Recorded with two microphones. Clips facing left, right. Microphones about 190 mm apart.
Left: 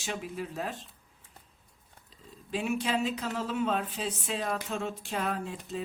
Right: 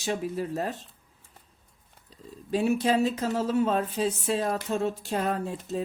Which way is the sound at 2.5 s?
40° right (ahead or behind).